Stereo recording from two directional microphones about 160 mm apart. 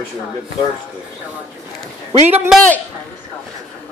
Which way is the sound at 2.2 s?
10° right (ahead or behind).